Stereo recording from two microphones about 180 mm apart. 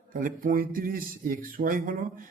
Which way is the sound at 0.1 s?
50° right (ahead or behind).